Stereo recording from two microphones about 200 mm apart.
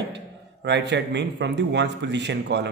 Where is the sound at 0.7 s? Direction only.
60° right (ahead or behind).